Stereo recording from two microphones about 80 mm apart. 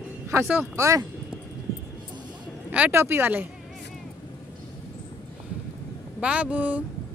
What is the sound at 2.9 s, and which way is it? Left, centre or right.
Speech, right.